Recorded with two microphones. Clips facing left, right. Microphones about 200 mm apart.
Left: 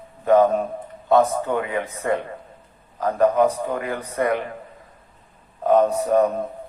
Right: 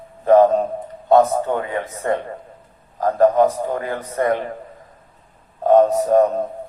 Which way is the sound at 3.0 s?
40° right (ahead or behind).